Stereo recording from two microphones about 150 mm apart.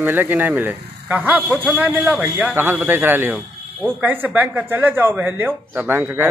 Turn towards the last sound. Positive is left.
turn(degrees=-15)  # may be behind; listen again after turning